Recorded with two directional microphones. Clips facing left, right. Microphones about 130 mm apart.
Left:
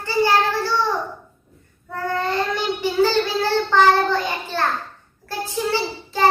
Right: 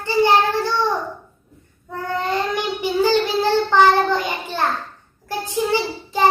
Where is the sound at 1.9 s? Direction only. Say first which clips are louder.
Even; 15° right (ahead or behind).